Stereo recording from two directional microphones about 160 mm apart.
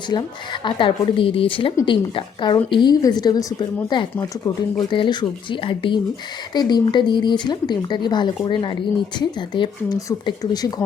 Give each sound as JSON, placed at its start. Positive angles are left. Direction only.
{"t": 0.1, "sound": "speech", "side_deg": 30}
{"t": 4.1, "sound": "speech", "side_deg": 15}